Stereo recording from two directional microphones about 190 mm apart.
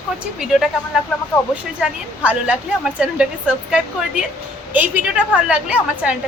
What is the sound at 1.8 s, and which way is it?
A woman's voice, 5° right (ahead or behind).